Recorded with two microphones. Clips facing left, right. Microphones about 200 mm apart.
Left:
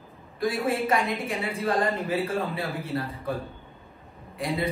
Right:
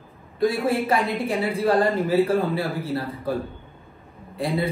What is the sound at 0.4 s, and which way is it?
Speech, 30° right (ahead or behind).